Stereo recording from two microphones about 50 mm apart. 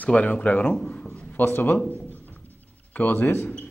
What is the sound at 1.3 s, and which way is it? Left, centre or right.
Speech, left.